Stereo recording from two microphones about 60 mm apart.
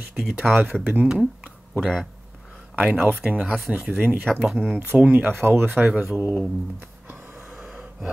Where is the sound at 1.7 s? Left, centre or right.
Centre.